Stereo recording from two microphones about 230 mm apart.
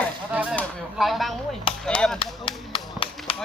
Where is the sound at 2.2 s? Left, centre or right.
Left.